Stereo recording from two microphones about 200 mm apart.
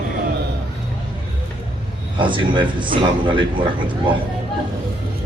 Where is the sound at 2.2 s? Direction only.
25° right (ahead or behind).